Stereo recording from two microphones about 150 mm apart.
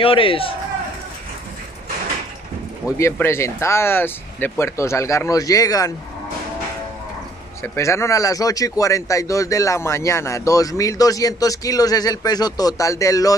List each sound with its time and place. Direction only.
0.0 s speech: 35° left (ahead or behind)
3.0 s speech: 15° left (ahead or behind)
7.6 s speech: 20° left (ahead or behind)